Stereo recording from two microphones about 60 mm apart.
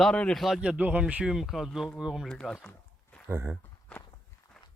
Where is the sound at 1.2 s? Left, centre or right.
Centre.